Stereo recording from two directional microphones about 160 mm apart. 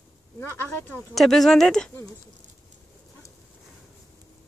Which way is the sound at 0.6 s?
10° left (ahead or behind).